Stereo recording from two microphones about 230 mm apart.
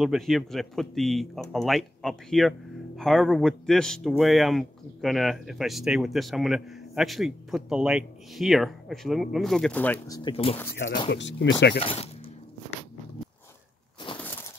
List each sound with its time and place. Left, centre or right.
0.0 s speech: centre; by 10.6 s left
11.1 s speech: left
11.8 s speech: left
14.1 s a sound: left